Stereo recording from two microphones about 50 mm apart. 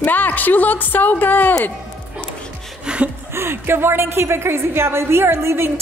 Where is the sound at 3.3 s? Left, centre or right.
Right.